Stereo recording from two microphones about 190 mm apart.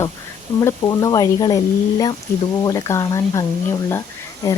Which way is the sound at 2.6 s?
20° left (ahead or behind).